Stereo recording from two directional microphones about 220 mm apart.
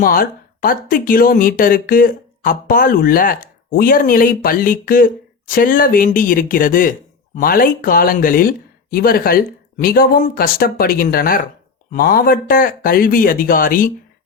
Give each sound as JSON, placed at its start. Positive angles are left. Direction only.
{"t": 0.0, "sound": "speech", "side_deg": 40}